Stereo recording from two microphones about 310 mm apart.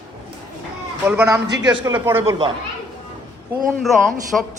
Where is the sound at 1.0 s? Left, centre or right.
Centre.